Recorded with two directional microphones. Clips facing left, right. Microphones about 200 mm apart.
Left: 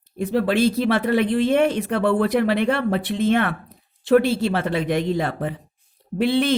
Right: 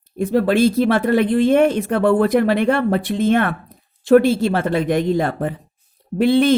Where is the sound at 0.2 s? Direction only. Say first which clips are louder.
Right 4 dB; 45° right (ahead or behind).